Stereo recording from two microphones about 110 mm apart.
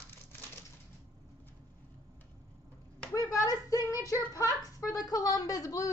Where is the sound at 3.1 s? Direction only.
35° left (ahead or behind).